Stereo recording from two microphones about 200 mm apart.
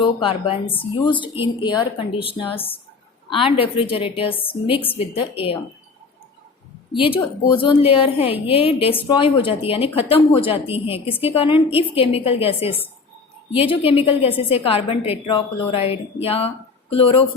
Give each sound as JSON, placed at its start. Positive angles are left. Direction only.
{"t": 0.0, "sound": "a woman's voice", "side_deg": 25}
{"t": 6.9, "sound": "a woman's voice", "side_deg": 25}